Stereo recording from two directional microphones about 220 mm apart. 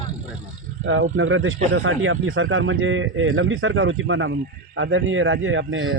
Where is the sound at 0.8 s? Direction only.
65° right (ahead or behind).